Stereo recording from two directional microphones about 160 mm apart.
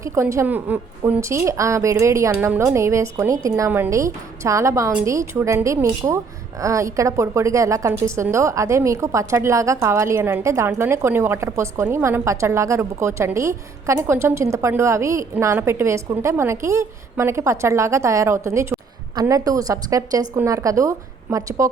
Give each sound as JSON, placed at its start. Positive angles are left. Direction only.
{"t": 0.0, "sound": "a woman's voice", "side_deg": -20}